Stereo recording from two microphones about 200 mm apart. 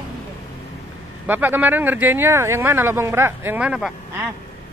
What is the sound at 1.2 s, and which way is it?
Speech, 10° right (ahead or behind).